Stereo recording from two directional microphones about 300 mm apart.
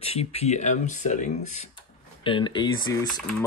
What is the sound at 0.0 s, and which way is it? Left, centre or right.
Speech, centre.